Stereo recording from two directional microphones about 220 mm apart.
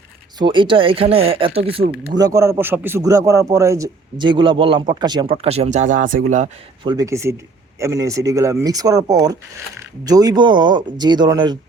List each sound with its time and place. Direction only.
0.3 s a man's voice: 20° right (ahead or behind)
2.1 s a man's voice: 15° right (ahead or behind); by 6.5 s 35° right (ahead or behind)
6.8 s a man's voice: 15° right (ahead or behind)